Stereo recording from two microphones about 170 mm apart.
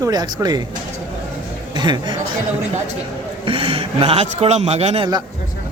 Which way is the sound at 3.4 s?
30° right (ahead or behind).